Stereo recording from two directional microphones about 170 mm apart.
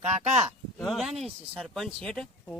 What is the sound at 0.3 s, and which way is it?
Speech, centre (ahead or behind).